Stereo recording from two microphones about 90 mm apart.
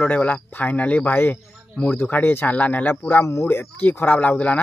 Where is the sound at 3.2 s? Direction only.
35° left (ahead or behind); by 4.6 s 15° left (ahead or behind).